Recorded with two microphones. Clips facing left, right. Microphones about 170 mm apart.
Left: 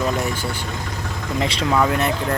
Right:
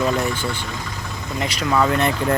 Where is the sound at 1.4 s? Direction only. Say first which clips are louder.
Left 2 dB; 30° left (ahead or behind).